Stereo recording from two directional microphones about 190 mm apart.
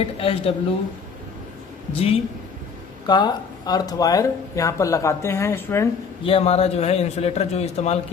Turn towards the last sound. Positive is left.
turn(degrees=35)  # may be behind; listen again after turning